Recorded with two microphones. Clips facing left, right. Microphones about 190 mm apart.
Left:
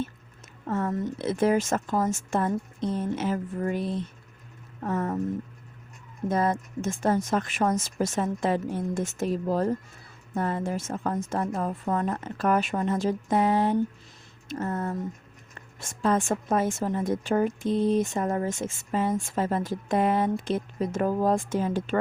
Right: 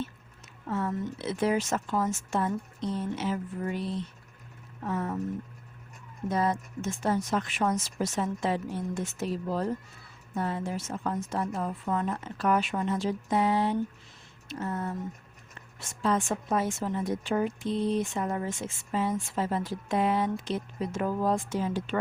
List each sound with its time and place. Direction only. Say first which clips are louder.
0.7 s a woman's voice: left 3 dB; 45° left (ahead or behind)
6.2 s a woman's voice: left 3 dB; 50° left (ahead or behind)